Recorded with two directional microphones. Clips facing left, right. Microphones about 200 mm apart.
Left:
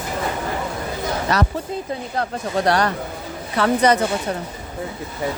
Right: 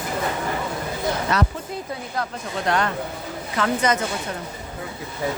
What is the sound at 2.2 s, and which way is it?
Speech, 35° left (ahead or behind).